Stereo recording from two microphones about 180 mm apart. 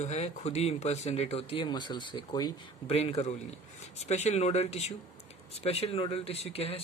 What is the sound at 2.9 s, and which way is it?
Speech, 35° left (ahead or behind).